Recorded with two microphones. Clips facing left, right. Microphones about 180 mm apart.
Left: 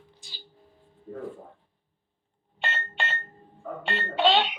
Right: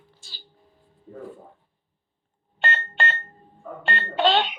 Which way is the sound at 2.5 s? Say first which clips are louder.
Right 5 dB; centre (ahead or behind).